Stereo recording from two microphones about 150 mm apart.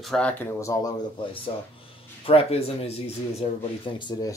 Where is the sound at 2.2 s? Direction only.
40° left (ahead or behind).